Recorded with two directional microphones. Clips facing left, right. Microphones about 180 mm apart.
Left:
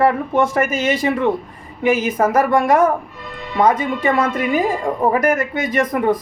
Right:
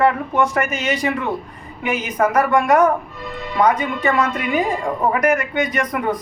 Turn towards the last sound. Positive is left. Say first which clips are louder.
# left 3 dB
turn(degrees=25)  # may be behind; listen again after turning